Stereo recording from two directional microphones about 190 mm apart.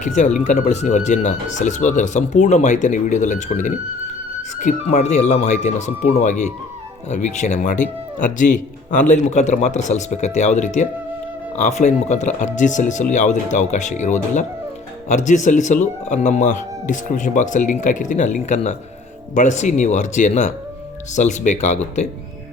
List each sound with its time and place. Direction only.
0.0 s speech: 40° left (ahead or behind)
8.9 s speech: 40° left (ahead or behind)